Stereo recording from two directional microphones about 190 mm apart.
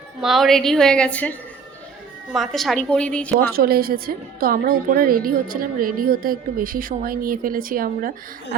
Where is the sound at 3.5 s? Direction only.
55° right (ahead or behind).